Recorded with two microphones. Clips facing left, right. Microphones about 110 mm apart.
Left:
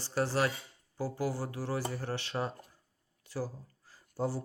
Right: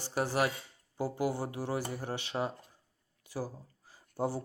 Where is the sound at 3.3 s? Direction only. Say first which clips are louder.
Left 1 dB; 15° right (ahead or behind).